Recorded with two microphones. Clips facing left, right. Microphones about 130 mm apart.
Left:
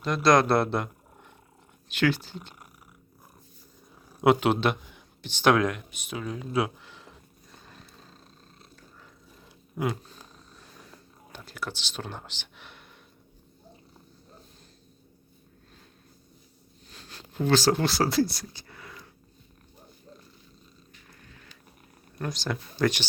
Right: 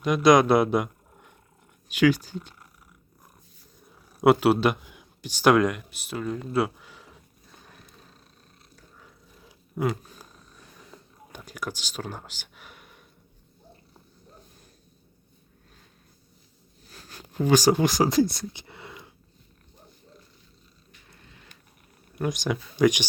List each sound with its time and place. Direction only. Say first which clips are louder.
0.0 s speech: right 3 dB; 15° right (ahead or behind)
4.2 s speech: right 3 dB; 5° right (ahead or behind)
9.7 s speech: right 2 dB; centre (ahead or behind)
10.9 s a sound: right 3 dB; 15° right (ahead or behind)
16.9 s speech: right 1 dB; 10° right (ahead or behind)
18.6 s a sound: right 3 dB; 20° right (ahead or behind)
22.2 s speech: right 5 dB; 15° right (ahead or behind)